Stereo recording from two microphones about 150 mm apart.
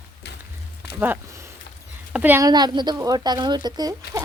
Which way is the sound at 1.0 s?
15° right (ahead or behind).